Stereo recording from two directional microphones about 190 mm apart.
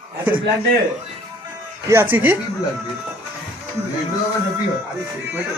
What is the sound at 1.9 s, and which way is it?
Speech, 10° right (ahead or behind).